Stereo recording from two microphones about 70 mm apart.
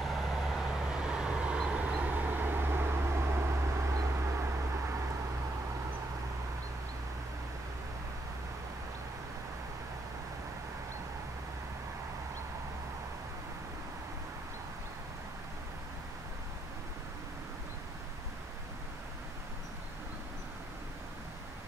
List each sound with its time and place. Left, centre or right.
0.0 s vehicle: centre; by 4.9 s right